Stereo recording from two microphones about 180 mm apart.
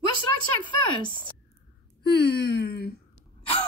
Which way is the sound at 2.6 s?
60° left (ahead or behind).